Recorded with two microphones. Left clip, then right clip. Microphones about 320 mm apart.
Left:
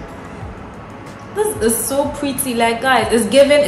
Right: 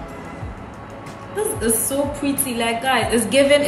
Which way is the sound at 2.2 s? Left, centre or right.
Centre.